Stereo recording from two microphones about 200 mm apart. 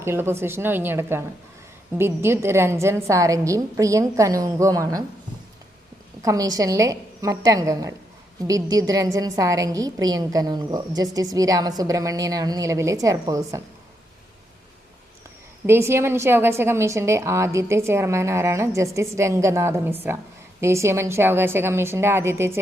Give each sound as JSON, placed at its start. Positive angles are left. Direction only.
{"t": 0.0, "sound": "a woman's voice", "side_deg": -10}
{"t": 6.2, "sound": "a woman's voice", "side_deg": -15}
{"t": 15.6, "sound": "a woman's voice", "side_deg": -10}